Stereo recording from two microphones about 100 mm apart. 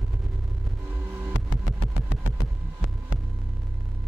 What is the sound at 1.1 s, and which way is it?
Vehicle, 20° right (ahead or behind).